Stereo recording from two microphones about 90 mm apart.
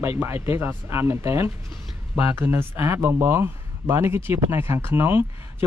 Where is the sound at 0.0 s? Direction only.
25° right (ahead or behind).